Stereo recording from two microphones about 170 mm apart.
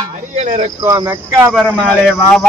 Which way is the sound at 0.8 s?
20° right (ahead or behind).